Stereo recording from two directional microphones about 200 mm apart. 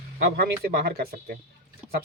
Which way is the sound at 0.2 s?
55° right (ahead or behind).